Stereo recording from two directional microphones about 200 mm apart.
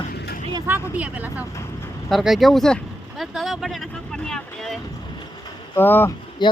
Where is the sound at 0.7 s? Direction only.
5° right (ahead or behind); by 6.1 s 10° left (ahead or behind).